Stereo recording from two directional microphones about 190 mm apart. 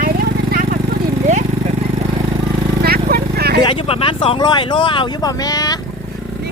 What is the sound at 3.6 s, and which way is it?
Speech, 30° left (ahead or behind).